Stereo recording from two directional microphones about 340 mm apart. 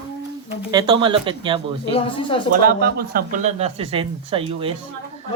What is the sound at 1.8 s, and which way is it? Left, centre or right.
Speech, centre.